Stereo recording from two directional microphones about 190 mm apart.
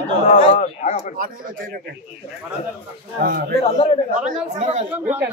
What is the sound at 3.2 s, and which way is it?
Speech, 50° right (ahead or behind).